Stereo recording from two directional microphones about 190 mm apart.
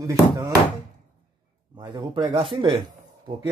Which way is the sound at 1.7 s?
25° right (ahead or behind).